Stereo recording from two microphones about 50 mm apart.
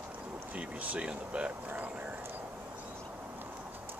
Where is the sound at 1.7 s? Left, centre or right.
Right.